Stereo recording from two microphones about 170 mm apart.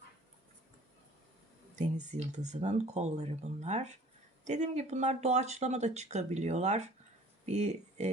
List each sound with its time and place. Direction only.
1.8 s speech: 45° right (ahead or behind)